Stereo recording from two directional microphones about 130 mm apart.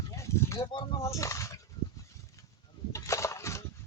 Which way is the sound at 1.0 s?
25° left (ahead or behind).